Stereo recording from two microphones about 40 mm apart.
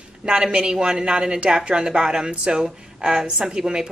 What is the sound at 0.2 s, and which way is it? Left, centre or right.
Speech, right.